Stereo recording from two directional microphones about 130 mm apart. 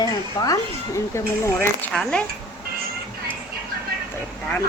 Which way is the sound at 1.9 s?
5° left (ahead or behind).